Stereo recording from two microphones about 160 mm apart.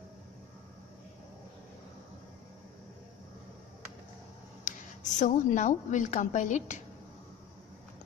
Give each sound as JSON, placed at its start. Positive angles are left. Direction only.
{"t": 4.6, "sound": "speech", "side_deg": 50}